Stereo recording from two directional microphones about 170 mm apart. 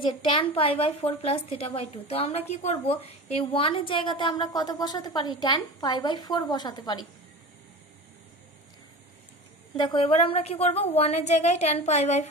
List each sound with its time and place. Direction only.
0.0 s a woman's voice: 30° left (ahead or behind)
9.8 s a woman's voice: 30° left (ahead or behind)